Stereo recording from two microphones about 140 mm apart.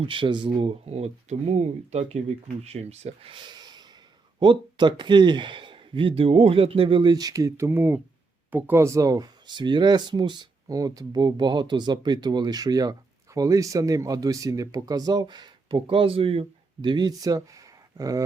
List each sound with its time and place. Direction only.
0.0 s speech: 35° right (ahead or behind)
0.6 s speech: 50° right (ahead or behind); by 18.2 s 25° right (ahead or behind)